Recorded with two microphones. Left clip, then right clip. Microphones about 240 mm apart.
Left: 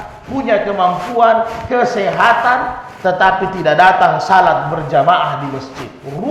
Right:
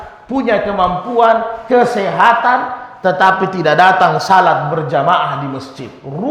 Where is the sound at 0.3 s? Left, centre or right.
Right.